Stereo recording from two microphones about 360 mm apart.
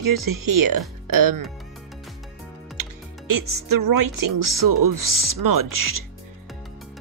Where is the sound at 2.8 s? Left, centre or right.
Right.